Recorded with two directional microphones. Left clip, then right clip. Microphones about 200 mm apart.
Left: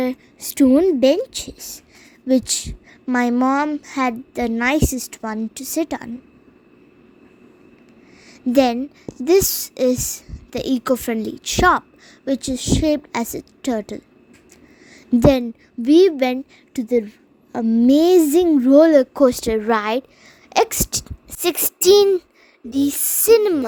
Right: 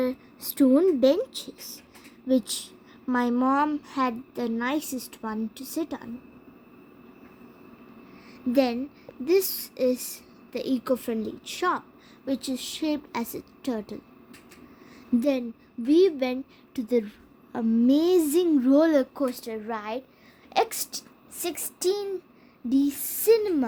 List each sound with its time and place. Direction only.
0.0 s a woman's voice: 35° left (ahead or behind)
8.3 s a woman's voice: 35° left (ahead or behind)
12.2 s a woman's voice: 30° left (ahead or behind)
15.2 s a woman's voice: 40° left (ahead or behind)
16.9 s a woman's voice: 15° left (ahead or behind)
17.8 s speech: 30° left (ahead or behind)
19.2 s a woman's voice: 40° left (ahead or behind)